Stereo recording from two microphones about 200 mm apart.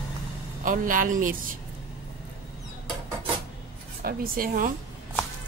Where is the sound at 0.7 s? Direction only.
40° right (ahead or behind).